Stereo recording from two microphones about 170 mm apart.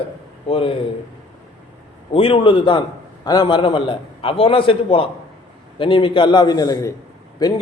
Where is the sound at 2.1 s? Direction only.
35° left (ahead or behind).